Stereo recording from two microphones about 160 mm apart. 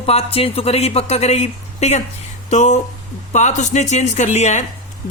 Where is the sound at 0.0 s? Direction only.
40° left (ahead or behind).